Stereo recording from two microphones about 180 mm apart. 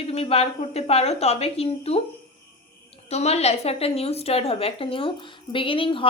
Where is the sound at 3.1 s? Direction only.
35° left (ahead or behind).